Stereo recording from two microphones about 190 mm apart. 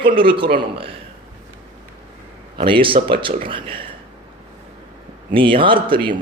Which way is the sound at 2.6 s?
25° right (ahead or behind).